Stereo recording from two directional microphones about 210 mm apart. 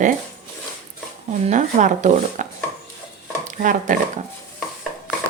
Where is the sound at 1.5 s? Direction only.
35° right (ahead or behind).